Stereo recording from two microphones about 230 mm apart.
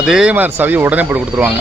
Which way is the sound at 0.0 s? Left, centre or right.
Centre.